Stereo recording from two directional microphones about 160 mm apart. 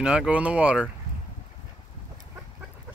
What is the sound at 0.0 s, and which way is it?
Speech, 5° right (ahead or behind).